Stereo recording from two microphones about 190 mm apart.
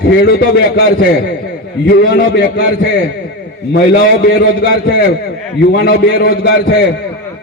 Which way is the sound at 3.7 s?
60° left (ahead or behind).